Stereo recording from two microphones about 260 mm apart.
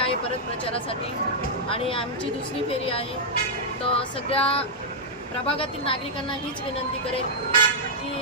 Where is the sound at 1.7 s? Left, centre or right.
Left.